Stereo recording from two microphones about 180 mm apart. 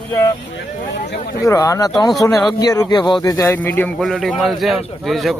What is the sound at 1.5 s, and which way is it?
A man's voice, 15° left (ahead or behind).